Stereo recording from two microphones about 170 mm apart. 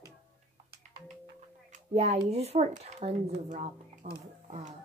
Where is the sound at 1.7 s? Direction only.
40° right (ahead or behind).